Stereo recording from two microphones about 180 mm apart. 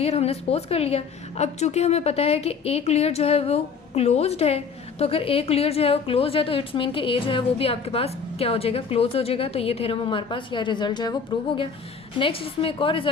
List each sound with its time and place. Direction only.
0.0 s a woman's voice: 35° left (ahead or behind)